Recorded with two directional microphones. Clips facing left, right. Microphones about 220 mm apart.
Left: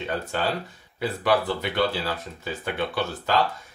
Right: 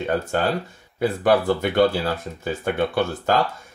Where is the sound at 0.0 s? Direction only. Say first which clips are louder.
Right 5 dB; 45° right (ahead or behind).